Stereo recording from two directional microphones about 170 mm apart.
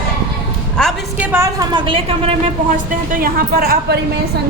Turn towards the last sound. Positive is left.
turn(degrees=-65)  # may be behind; listen again after turning